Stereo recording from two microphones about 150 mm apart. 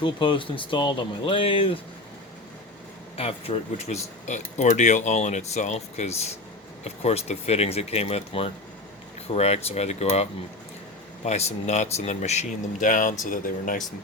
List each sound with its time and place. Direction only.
0.0 s speech: 35° left (ahead or behind)
3.2 s speech: 40° left (ahead or behind)
11.3 s speech: 45° left (ahead or behind); by 13.8 s 60° left (ahead or behind)